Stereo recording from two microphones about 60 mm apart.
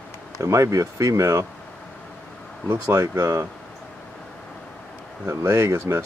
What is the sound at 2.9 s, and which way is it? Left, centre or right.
Speech, right.